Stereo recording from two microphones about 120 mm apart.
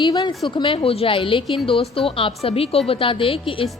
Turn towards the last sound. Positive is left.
turn(degrees=50)  # may be behind; listen again after turning